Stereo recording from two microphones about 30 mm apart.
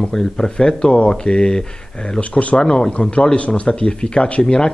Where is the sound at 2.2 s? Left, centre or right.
Left.